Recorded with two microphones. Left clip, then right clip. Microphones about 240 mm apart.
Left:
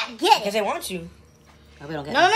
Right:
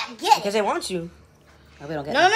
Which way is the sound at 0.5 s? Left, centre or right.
Right.